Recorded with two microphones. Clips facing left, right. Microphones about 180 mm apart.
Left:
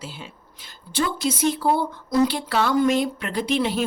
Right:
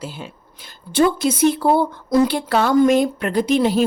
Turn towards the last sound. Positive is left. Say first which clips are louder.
# right 6 dB
turn(degrees=-40)  # may be behind; listen again after turning